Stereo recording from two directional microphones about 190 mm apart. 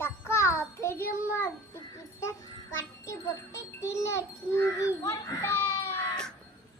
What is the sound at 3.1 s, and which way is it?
Music, 15° left (ahead or behind).